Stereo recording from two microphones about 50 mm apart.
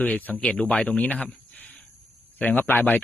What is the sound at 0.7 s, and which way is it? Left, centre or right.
Speech, left.